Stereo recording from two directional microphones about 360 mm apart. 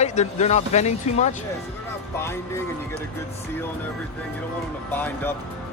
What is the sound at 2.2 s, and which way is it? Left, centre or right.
Speech, centre.